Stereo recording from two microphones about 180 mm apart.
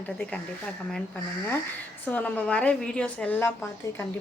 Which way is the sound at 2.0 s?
10° left (ahead or behind).